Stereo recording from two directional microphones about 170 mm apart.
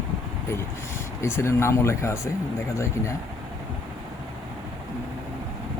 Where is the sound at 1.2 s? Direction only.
15° left (ahead or behind).